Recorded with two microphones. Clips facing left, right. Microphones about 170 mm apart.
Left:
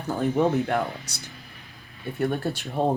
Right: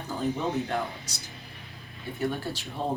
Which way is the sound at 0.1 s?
60° left (ahead or behind).